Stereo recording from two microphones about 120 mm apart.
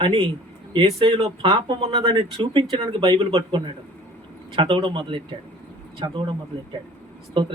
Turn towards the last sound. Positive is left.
turn(degrees=-45)  # may be behind; listen again after turning